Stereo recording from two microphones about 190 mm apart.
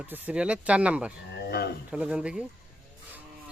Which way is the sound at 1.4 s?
60° left (ahead or behind).